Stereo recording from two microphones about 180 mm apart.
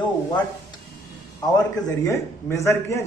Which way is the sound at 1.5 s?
20° left (ahead or behind).